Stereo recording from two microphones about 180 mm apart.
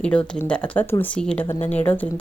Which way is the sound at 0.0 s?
5° left (ahead or behind).